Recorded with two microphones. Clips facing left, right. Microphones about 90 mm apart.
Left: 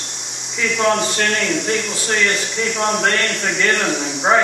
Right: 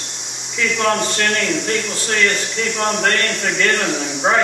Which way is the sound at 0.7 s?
10° left (ahead or behind).